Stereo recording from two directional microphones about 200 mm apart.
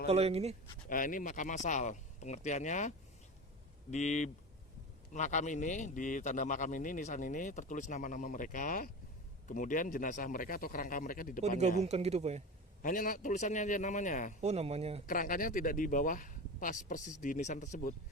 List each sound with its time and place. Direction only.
0.1 s speech: 30° right (ahead or behind)
0.9 s a man's voice: 40° left (ahead or behind)
3.9 s a man's voice: 35° left (ahead or behind)
11.4 s speech: 35° right (ahead or behind)
12.8 s a man's voice: 40° left (ahead or behind)
14.4 s speech: 30° right (ahead or behind)
15.0 s a man's voice: 40° left (ahead or behind)